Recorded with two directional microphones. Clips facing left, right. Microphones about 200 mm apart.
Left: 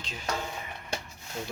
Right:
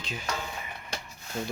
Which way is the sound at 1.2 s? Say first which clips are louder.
Right 3 dB; 20° left (ahead or behind).